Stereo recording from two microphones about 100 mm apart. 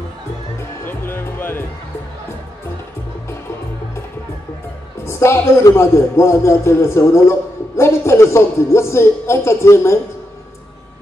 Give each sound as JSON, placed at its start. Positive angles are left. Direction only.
{"t": 0.8, "sound": "music", "side_deg": 20}
{"t": 5.0, "sound": "a woman's voice", "side_deg": 25}